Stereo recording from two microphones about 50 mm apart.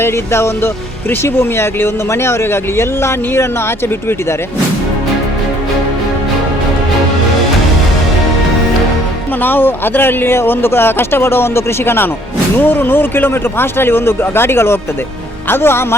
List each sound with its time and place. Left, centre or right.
0.0 s speech: left
9.4 s speech: left
12.5 s speech: left